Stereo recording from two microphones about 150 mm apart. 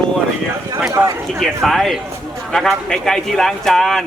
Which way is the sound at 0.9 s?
20° right (ahead or behind).